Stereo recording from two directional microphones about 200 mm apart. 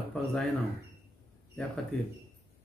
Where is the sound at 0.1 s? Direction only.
Centre (ahead or behind).